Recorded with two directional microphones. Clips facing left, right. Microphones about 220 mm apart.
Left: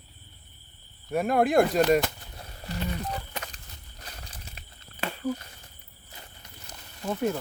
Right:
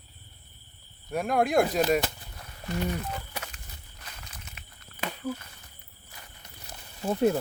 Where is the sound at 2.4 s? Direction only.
30° left (ahead or behind).